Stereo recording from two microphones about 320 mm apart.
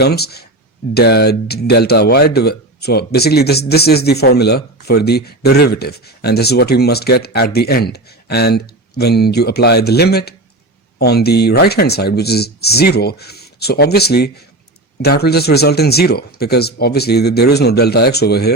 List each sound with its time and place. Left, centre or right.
0.0 s speech: left